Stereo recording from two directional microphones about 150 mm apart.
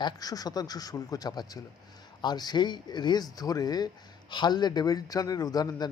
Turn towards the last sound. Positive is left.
turn(degrees=25)  # may be behind; listen again after turning